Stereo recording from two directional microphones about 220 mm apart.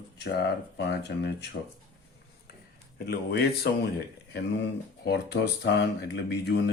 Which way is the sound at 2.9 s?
45° left (ahead or behind).